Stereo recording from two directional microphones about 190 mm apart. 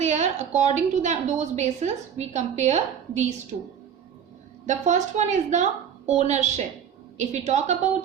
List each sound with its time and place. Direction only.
0.0 s a woman's voice: 35° right (ahead or behind)
4.6 s a woman's voice: 40° right (ahead or behind)